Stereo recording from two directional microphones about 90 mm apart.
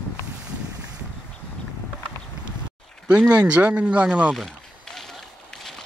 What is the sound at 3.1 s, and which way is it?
Speech, 15° right (ahead or behind).